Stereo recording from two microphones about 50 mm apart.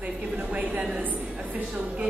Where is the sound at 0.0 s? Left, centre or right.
Right.